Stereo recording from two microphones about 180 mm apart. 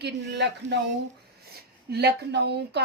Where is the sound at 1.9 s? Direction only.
65° right (ahead or behind).